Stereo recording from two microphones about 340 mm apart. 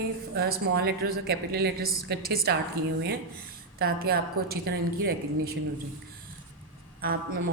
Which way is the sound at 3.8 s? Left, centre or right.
Right.